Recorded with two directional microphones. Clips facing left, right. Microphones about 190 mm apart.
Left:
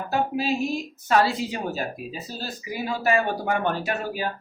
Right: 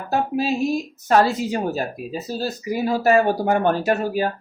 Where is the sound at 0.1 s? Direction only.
40° right (ahead or behind).